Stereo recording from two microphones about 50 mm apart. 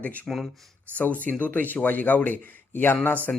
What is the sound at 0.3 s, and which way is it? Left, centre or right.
Speech, centre.